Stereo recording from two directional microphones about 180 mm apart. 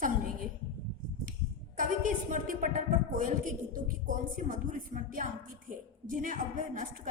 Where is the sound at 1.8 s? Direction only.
45° right (ahead or behind).